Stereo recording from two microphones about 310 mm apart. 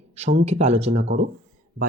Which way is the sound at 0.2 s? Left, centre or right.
Right.